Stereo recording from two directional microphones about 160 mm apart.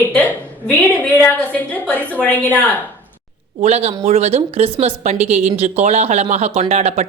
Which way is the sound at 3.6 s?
40° right (ahead or behind).